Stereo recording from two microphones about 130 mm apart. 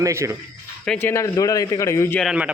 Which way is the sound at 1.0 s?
20° left (ahead or behind).